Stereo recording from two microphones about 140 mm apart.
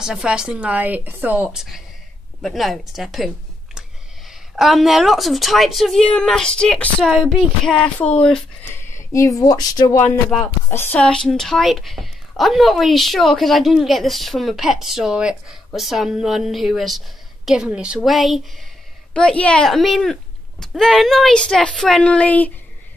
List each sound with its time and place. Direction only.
0.0 s a woman's voice: 5° right (ahead or behind)
4.3 s a woman's voice: centre (ahead or behind)
8.9 s speech: 20° left (ahead or behind)
10.7 s a woman's voice: 15° left (ahead or behind)
11.1 s a woman's voice: 5° left (ahead or behind)